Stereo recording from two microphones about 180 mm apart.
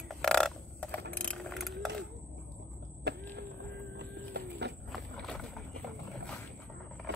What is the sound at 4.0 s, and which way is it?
Horse, 70° right (ahead or behind).